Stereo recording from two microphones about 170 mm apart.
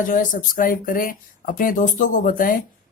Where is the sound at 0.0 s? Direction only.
50° left (ahead or behind).